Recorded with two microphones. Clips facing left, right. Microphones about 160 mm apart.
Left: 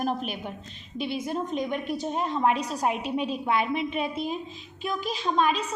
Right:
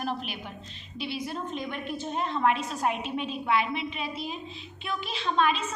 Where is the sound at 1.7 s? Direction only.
10° left (ahead or behind).